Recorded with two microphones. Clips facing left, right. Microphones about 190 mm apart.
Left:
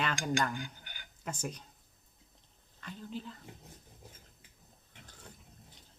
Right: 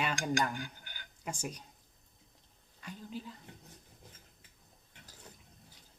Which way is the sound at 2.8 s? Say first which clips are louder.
Left 1 dB; 10° right (ahead or behind).